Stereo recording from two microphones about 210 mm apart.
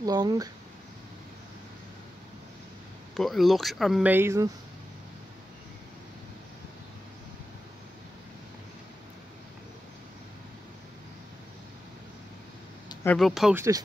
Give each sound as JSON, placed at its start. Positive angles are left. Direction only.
{"t": 0.0, "sound": "speech", "side_deg": -20}
{"t": 3.2, "sound": "speech", "side_deg": 0}
{"t": 13.0, "sound": "speech", "side_deg": 5}
{"t": 13.6, "sound": "speech", "side_deg": -15}